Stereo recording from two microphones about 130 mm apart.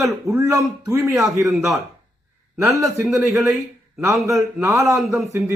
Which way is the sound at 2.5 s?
20° right (ahead or behind).